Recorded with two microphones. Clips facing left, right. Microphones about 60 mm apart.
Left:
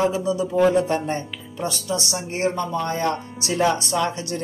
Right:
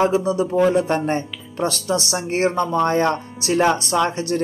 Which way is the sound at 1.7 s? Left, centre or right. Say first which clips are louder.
Right 2 dB; right.